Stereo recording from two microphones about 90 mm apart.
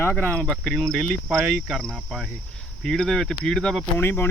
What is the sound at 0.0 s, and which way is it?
Speech, 20° left (ahead or behind).